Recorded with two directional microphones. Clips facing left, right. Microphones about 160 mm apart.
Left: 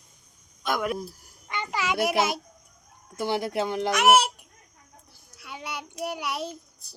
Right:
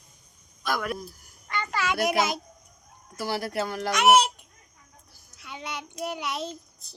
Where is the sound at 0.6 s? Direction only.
20° left (ahead or behind).